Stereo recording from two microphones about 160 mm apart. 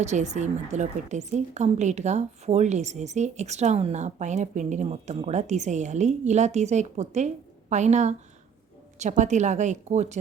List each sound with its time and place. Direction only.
0.0 s a woman's voice: 45° right (ahead or behind)